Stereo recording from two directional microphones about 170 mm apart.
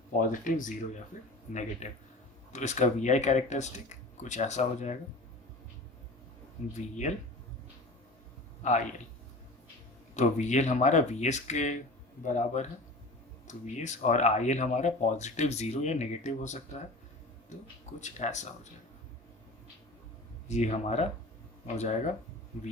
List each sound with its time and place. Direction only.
0.1 s speech: 50° left (ahead or behind)
6.7 s speech: 45° left (ahead or behind)
10.2 s speech: 45° left (ahead or behind)
18.0 s speech: 45° left (ahead or behind)
20.5 s speech: 40° left (ahead or behind)